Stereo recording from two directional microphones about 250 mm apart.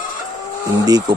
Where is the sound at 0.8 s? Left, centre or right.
Centre.